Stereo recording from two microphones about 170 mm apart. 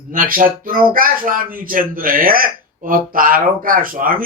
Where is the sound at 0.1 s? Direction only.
55° right (ahead or behind).